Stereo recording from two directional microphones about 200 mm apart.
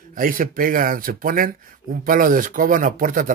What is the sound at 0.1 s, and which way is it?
Speech, 45° right (ahead or behind).